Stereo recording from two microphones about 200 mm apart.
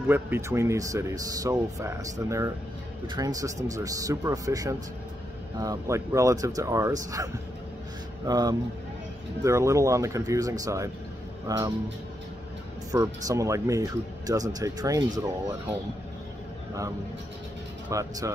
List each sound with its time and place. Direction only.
0.1 s speech: 10° right (ahead or behind)
8.3 s speech: 20° right (ahead or behind)
12.9 s speech: 15° right (ahead or behind)
17.8 s speech: 15° right (ahead or behind)